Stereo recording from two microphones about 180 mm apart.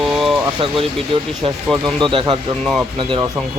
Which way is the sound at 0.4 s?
30° right (ahead or behind).